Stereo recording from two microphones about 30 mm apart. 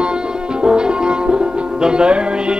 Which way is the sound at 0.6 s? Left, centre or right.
Right.